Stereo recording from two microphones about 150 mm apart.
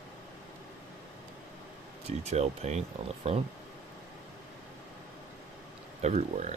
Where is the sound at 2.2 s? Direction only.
45° right (ahead or behind).